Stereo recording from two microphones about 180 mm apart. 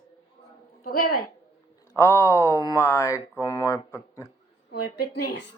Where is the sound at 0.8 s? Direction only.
55° left (ahead or behind).